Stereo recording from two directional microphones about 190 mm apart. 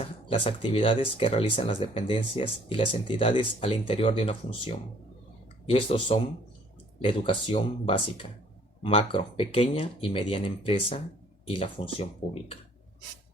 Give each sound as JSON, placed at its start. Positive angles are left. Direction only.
{"t": 0.0, "sound": "speech", "side_deg": 30}